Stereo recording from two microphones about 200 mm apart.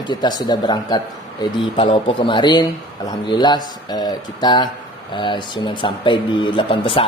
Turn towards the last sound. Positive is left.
turn(degrees=25)  # may be behind; listen again after turning